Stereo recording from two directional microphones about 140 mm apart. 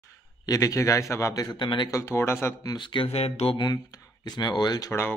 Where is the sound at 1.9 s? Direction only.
20° left (ahead or behind).